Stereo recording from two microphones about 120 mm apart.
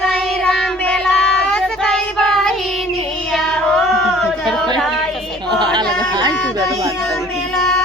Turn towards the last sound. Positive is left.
turn(degrees=-40)  # may be behind; listen again after turning